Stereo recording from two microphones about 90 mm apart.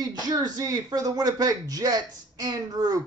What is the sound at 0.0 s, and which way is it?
Speech, 45° right (ahead or behind).